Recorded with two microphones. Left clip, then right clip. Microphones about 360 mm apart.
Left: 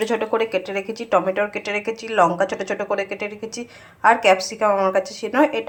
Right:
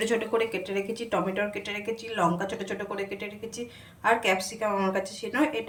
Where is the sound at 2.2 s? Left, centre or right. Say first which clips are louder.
Left 10 dB; left.